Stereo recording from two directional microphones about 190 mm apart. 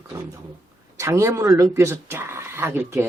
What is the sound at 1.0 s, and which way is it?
Speech, 15° right (ahead or behind).